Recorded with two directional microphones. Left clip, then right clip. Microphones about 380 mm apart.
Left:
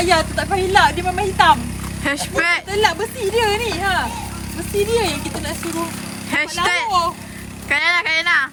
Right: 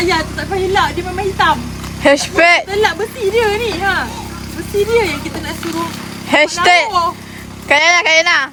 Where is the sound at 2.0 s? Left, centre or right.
Centre.